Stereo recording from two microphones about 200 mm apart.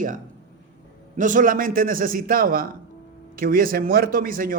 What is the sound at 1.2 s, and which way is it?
A man's voice, 40° right (ahead or behind).